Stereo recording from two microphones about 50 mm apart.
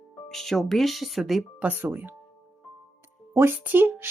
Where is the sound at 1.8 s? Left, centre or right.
Right.